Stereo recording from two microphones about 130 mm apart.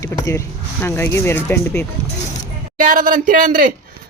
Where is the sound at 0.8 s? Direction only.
20° left (ahead or behind).